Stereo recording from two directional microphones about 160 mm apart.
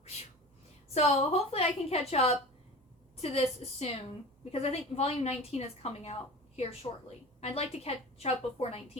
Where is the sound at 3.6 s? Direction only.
40° left (ahead or behind).